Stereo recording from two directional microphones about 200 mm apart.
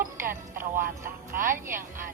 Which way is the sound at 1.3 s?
40° right (ahead or behind).